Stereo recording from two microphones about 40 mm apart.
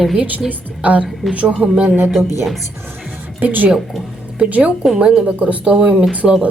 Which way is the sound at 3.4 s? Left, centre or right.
Right.